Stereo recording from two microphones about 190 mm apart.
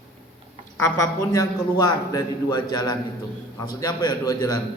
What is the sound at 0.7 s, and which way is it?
A man's voice, 15° left (ahead or behind).